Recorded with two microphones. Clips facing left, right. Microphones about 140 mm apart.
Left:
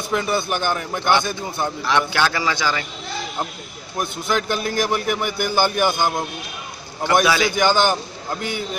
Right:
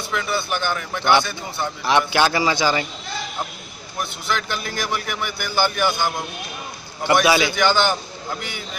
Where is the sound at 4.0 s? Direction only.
45° left (ahead or behind).